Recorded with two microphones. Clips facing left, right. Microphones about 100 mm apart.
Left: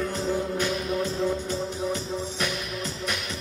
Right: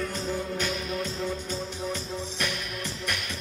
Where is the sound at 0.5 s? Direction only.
15° left (ahead or behind).